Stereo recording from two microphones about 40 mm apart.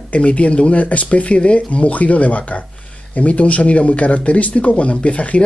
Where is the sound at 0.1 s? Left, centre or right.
Left.